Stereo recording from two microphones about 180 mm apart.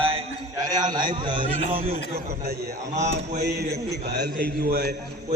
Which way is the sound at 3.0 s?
40° right (ahead or behind).